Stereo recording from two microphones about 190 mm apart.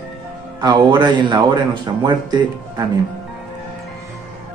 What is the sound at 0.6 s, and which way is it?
A man's voice, 20° right (ahead or behind).